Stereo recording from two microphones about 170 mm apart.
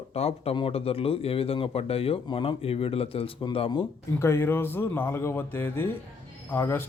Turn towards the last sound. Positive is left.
turn(degrees=15)  # may be behind; listen again after turning